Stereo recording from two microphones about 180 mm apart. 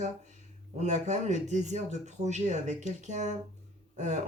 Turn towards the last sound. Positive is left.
turn(degrees=-40)  # may be behind; listen again after turning